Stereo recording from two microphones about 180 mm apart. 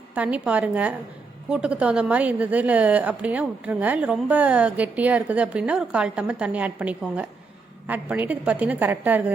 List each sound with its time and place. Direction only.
0.1 s a woman's voice: 10° right (ahead or behind)